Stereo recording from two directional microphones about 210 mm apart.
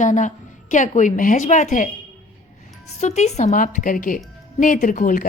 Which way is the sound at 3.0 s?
35° left (ahead or behind).